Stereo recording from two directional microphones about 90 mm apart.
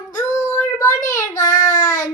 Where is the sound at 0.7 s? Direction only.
35° left (ahead or behind).